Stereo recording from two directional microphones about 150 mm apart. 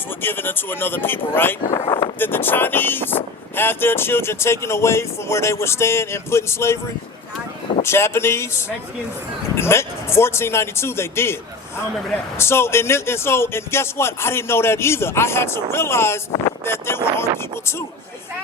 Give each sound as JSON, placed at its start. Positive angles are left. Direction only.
{"t": 0.2, "sound": "speech", "side_deg": 15}
{"t": 7.8, "sound": "speech", "side_deg": 15}
{"t": 12.4, "sound": "speech", "side_deg": 15}